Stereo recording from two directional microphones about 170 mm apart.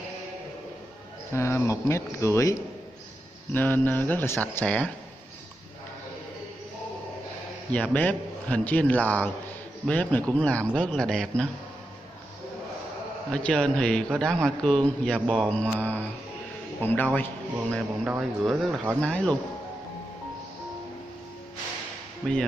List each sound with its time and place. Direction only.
1.3 s a man's voice: 15° left (ahead or behind)
3.5 s a man's voice: 10° left (ahead or behind)
7.7 s a man's voice: 10° left (ahead or behind)
13.3 s a man's voice: 5° left (ahead or behind)
18.0 s a man's voice: 5° right (ahead or behind)
22.2 s speech: 10° right (ahead or behind)